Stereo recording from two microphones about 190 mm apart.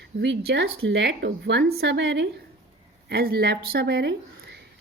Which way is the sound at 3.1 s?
55° right (ahead or behind).